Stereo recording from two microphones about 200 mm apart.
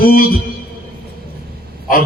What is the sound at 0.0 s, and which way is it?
Speech, 45° left (ahead or behind).